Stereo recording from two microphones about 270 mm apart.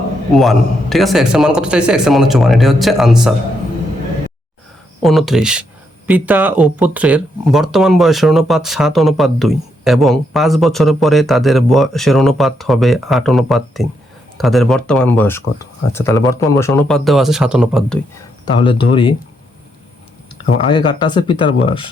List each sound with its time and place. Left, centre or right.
0.3 s speech: centre
5.0 s speech: centre
18.5 s speech: centre
20.4 s speech: centre